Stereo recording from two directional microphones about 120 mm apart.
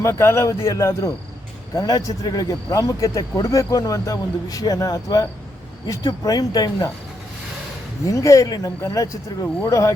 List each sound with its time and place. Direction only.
0.0 s speech: 20° left (ahead or behind)
8.0 s speech: 25° left (ahead or behind)